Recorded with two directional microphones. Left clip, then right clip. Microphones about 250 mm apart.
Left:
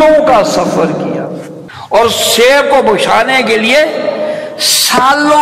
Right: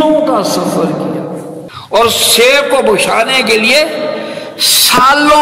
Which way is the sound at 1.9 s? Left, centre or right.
Right.